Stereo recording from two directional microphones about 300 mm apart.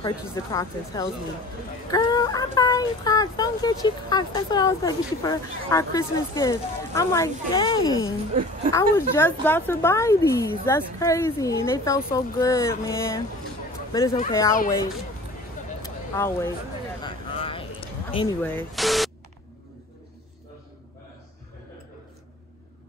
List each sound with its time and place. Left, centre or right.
0.0 s speech: centre
15.8 s a sound: centre
18.4 s speech: centre